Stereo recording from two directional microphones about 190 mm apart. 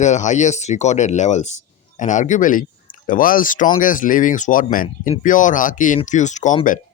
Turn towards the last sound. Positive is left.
turn(degrees=40)  # may be behind; listen again after turning